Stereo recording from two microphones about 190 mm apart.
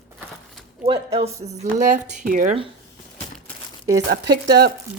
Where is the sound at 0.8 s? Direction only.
30° right (ahead or behind).